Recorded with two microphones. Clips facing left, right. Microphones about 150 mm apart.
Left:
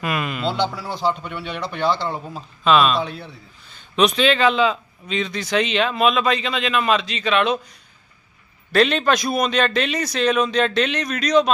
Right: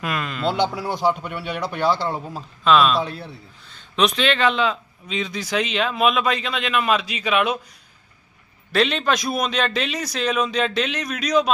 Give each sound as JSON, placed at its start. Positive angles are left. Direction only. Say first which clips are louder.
{"t": 0.0, "sound": "a sound", "louder": "left 2 dB", "side_deg": 5}
{"t": 0.4, "sound": "speech", "louder": "right 4 dB", "side_deg": -15}
{"t": 8.7, "sound": "speech", "louder": "left 3 dB", "side_deg": 0}